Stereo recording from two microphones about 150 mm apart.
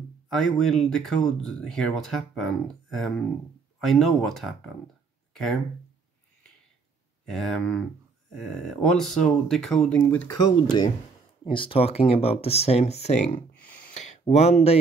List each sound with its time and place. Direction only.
0.3 s speech: centre (ahead or behind)
7.2 s speech: 5° left (ahead or behind)
10.3 s speech: 30° left (ahead or behind); by 13.4 s 50° left (ahead or behind)
13.7 s a sound: 60° left (ahead or behind); by 14.8 s 45° left (ahead or behind)